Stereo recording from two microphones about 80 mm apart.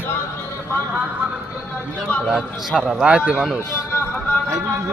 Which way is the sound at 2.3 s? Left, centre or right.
Centre.